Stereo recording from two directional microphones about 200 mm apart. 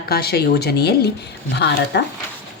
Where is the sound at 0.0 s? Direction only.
50° left (ahead or behind).